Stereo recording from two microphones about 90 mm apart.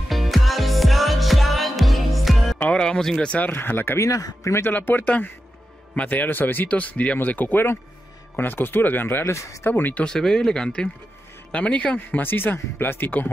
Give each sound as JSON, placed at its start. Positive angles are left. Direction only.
{"t": 0.1, "sound": "music", "side_deg": 0}
{"t": 2.6, "sound": "speech", "side_deg": 10}
{"t": 4.7, "sound": "speech", "side_deg": 20}
{"t": 9.7, "sound": "speech", "side_deg": 20}
{"t": 10.0, "sound": "speech", "side_deg": 10}